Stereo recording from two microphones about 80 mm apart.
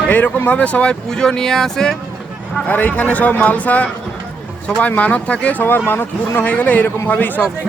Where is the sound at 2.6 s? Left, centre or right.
Centre.